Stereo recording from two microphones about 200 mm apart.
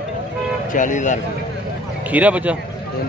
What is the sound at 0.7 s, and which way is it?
Speech, 40° left (ahead or behind).